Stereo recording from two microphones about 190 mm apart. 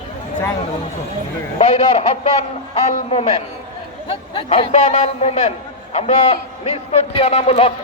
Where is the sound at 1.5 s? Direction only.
35° left (ahead or behind).